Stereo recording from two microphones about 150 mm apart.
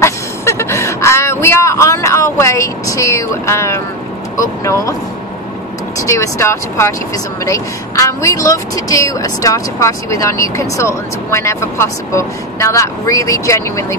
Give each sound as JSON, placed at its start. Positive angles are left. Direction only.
{"t": 0.0, "sound": "a sound", "side_deg": 20}
{"t": 4.4, "sound": "speech", "side_deg": 20}
{"t": 6.0, "sound": "speech", "side_deg": 20}